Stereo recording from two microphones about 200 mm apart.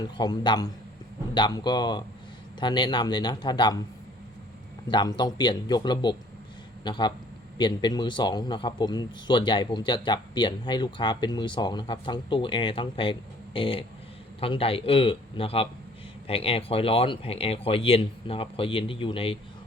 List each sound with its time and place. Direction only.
0.2 s a man's voice: 20° left (ahead or behind)
4.9 s a man's voice: 20° left (ahead or behind)